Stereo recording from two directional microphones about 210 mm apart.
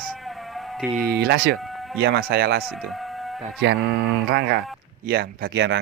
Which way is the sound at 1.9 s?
55° right (ahead or behind).